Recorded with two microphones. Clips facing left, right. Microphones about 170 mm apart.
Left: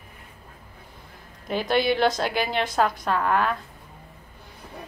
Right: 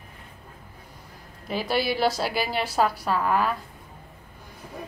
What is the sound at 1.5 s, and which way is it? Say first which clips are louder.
A woman's voice: left 3 dB; 5° right (ahead or behind).